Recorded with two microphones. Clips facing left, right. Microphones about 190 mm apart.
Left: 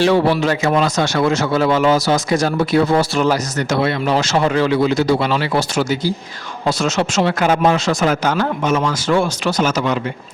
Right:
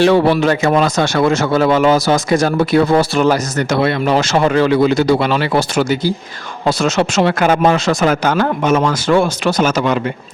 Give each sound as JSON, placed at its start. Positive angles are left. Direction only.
{"t": 0.0, "sound": "speech", "side_deg": -60}